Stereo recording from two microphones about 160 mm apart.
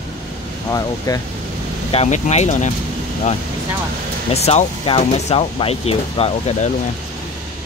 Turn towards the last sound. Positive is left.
turn(degrees=40)  # may be behind; listen again after turning